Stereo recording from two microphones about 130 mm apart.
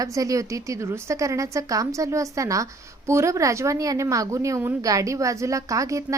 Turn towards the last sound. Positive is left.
turn(degrees=-25)  # may be behind; listen again after turning